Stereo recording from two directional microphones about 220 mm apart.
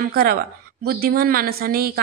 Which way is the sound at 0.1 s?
45° right (ahead or behind).